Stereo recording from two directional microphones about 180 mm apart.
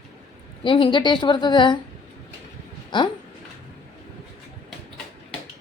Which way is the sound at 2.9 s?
25° left (ahead or behind).